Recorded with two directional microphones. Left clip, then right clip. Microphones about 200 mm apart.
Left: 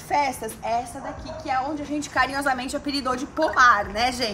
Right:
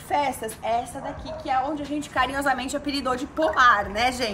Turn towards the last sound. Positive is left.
turn(degrees=0)  # may be behind; listen again after turning